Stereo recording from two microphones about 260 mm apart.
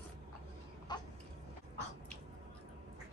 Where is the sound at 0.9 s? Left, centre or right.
Centre.